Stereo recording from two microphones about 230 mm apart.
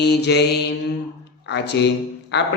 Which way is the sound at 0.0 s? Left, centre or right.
Left.